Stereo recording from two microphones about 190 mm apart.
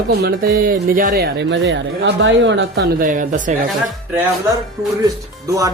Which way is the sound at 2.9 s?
45° right (ahead or behind).